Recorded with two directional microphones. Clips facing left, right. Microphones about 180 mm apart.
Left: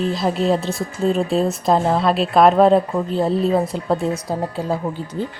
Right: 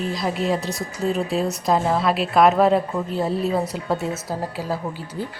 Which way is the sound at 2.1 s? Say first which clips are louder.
Left 3 dB; 25° left (ahead or behind).